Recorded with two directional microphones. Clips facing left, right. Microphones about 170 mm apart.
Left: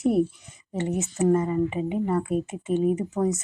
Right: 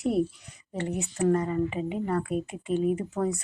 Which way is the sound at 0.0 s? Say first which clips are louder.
Left 4 dB; 50° left (ahead or behind).